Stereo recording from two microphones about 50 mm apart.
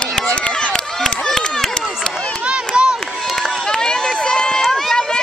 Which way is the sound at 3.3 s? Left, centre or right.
Centre.